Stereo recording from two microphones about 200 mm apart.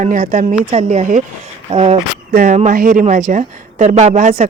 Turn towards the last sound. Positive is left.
turn(degrees=-40)  # may be behind; listen again after turning